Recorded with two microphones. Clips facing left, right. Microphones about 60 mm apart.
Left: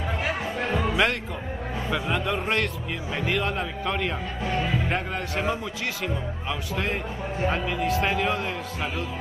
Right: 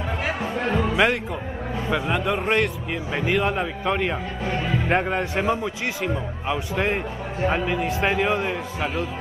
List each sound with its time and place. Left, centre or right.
0.7 s music: centre
1.9 s speech: centre
4.8 s a man's voice: right
5.4 s speech: centre
6.7 s a man's voice: right